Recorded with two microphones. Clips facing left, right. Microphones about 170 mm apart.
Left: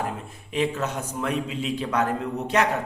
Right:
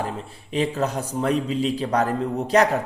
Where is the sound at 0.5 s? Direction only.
35° right (ahead or behind).